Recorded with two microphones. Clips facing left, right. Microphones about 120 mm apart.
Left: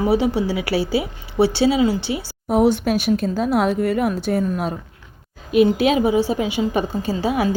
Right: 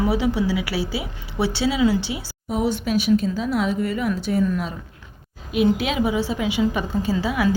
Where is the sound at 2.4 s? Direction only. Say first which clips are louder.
Left 6 dB; 65° left (ahead or behind); by 4.7 s 45° left (ahead or behind).